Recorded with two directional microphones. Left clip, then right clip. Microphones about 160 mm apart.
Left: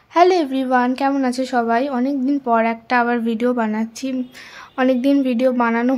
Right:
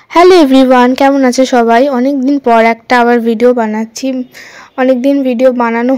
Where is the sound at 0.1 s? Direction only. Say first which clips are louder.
Right 10 dB; 55° right (ahead or behind).